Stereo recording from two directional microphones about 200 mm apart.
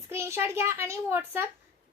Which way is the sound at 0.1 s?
15° right (ahead or behind).